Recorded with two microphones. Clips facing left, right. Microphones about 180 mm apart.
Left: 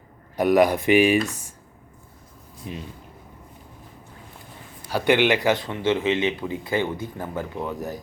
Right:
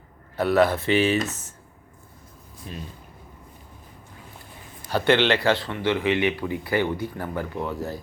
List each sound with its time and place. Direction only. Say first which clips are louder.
0.3 s speech: left 2 dB; 15° left (ahead or behind)
2.7 s speech: left 3 dB; 15° left (ahead or behind)
4.9 s speech: left 1 dB; 10° left (ahead or behind)